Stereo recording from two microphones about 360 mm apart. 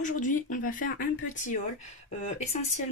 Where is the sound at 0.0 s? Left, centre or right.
Left.